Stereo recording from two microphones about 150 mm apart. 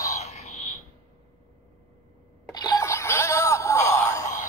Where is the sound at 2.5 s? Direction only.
25° left (ahead or behind).